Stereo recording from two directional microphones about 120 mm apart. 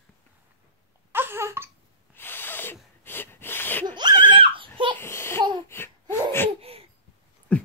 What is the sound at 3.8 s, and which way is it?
Screaming, 40° right (ahead or behind).